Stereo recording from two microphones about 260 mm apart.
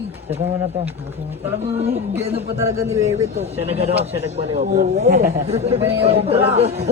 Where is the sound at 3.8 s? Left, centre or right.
Right.